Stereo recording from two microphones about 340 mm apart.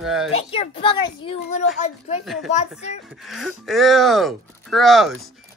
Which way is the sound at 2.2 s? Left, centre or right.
Centre.